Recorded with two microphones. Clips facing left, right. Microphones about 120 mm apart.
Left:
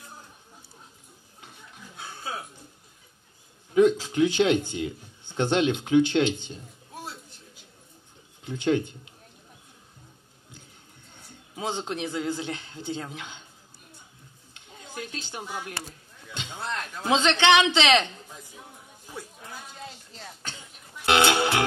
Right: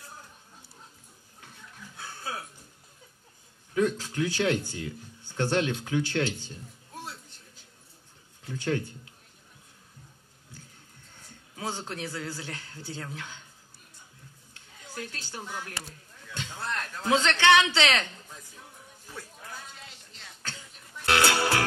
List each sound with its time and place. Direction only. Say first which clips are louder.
1.4 s a sound: left 1 dB; 20° left (ahead or behind)
3.7 s speech: left 7 dB; 20° left (ahead or behind)
8.5 s speech: left 5 dB; 20° left (ahead or behind)
11.5 s speech: left 4 dB; 20° left (ahead or behind)
14.5 s a sound: left 3 dB; 20° left (ahead or behind)
16.3 s a man's voice: left 1 dB; 20° left (ahead or behind)
20.4 s music: left 1 dB; 20° left (ahead or behind)